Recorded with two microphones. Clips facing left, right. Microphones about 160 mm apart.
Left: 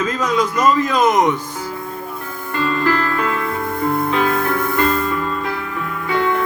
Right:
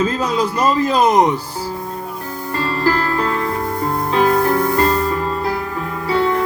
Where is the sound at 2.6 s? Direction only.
35° right (ahead or behind).